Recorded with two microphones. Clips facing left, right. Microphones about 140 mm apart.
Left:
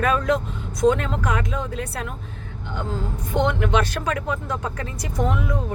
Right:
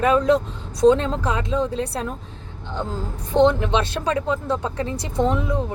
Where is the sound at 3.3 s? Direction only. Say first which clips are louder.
Right 4 dB; 30° right (ahead or behind).